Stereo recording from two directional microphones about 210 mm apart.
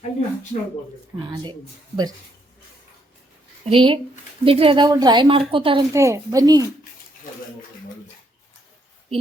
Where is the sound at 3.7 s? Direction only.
25° right (ahead or behind).